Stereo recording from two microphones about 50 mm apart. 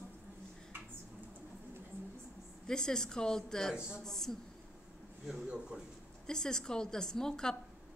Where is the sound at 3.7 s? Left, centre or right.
Centre.